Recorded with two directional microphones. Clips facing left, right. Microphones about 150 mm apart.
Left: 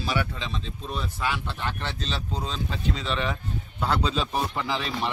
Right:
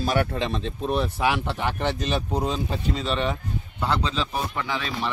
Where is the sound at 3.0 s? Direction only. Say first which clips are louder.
Right 4 dB; 30° right (ahead or behind).